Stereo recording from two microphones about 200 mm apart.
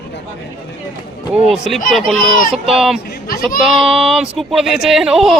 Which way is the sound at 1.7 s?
Centre (ahead or behind).